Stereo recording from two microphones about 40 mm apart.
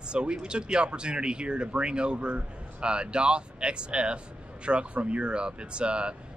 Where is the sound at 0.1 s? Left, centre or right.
Right.